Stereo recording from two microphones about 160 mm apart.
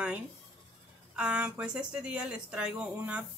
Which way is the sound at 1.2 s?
5° right (ahead or behind).